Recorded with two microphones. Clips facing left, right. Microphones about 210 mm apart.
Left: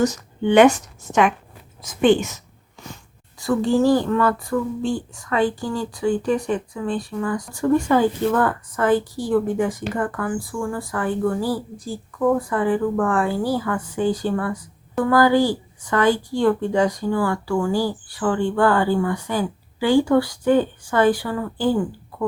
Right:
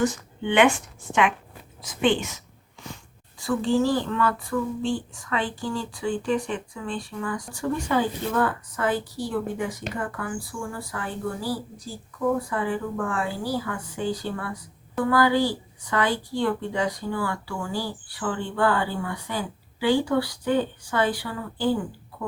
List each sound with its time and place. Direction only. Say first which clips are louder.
0.0 s a woman's voice: left 5 dB; 40° left (ahead or behind)
3.3 s a woman's voice: left 4 dB; 40° left (ahead or behind)